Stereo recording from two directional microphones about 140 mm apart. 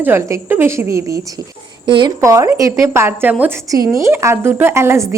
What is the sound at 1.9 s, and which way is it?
Speech, 35° right (ahead or behind).